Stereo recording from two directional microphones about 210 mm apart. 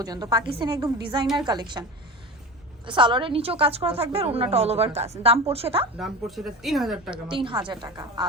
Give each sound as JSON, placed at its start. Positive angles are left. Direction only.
{"t": 0.0, "sound": "a woman's voice", "side_deg": -20}
{"t": 2.8, "sound": "a woman's voice", "side_deg": -25}
{"t": 6.0, "sound": "speech", "side_deg": 0}
{"t": 7.1, "sound": "a woman's voice", "side_deg": -25}